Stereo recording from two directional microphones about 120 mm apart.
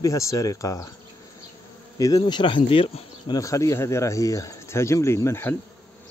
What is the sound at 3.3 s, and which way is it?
Speech, 25° left (ahead or behind).